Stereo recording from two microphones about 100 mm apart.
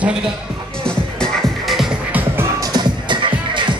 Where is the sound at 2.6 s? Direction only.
45° right (ahead or behind).